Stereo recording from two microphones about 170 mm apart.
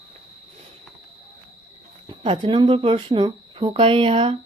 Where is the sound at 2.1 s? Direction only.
30° right (ahead or behind).